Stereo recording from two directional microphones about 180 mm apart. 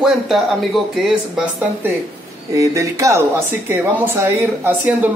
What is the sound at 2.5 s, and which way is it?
Speech, 15° right (ahead or behind).